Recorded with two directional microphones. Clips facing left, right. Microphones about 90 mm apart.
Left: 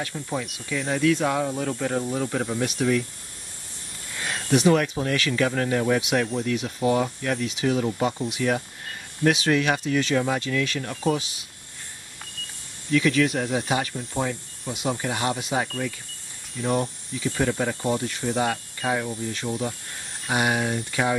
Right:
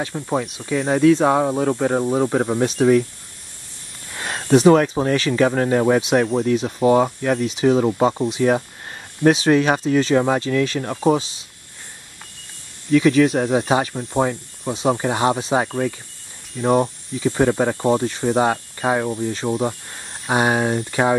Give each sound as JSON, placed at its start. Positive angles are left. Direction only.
{"t": 0.0, "sound": "speech", "side_deg": -40}
{"t": 4.2, "sound": "speech", "side_deg": -40}
{"t": 12.9, "sound": "speech", "side_deg": -40}